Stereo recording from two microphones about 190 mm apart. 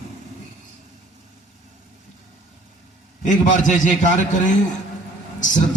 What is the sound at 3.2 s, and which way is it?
A man's voice, 40° left (ahead or behind).